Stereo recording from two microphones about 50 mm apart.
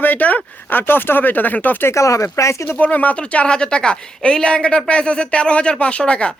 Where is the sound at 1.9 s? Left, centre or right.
Left.